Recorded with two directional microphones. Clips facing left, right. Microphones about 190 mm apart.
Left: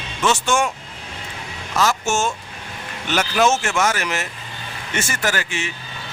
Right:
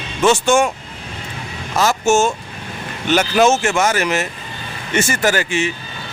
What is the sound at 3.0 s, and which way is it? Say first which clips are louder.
Speech: right 5 dB; centre (ahead or behind).